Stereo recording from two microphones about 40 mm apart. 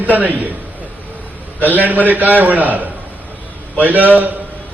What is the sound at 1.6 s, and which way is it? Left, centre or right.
A man's voice, right.